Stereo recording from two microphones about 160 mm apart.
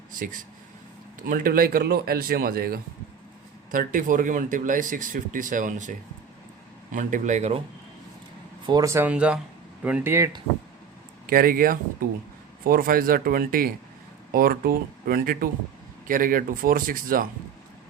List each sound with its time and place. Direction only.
0.1 s speech: 55° right (ahead or behind)
3.7 s speech: 60° right (ahead or behind)
8.6 s speech: 25° right (ahead or behind)
11.3 s speech: 65° right (ahead or behind)